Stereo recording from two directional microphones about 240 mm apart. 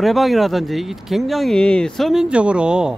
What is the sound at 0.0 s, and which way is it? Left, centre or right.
Speech, centre.